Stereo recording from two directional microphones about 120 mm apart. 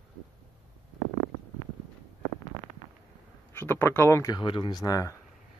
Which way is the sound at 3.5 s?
20° left (ahead or behind).